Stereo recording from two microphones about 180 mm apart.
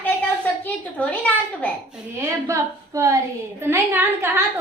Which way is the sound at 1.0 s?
10° left (ahead or behind).